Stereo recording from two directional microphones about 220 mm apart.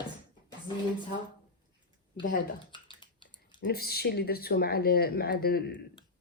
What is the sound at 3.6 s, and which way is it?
Speech, 45° left (ahead or behind).